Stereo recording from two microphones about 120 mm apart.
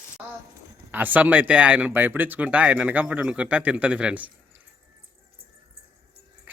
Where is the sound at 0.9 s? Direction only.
15° right (ahead or behind).